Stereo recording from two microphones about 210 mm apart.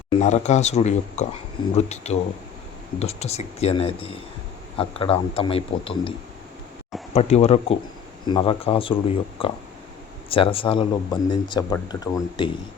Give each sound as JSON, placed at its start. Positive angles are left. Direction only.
{"t": 0.1, "sound": "speech", "side_deg": 30}